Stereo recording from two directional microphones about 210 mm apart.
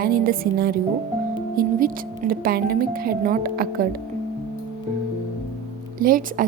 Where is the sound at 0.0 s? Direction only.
45° right (ahead or behind).